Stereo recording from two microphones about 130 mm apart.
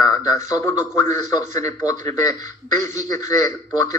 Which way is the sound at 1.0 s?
65° right (ahead or behind).